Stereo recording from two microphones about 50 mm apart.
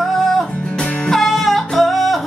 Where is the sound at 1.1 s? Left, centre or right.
Centre.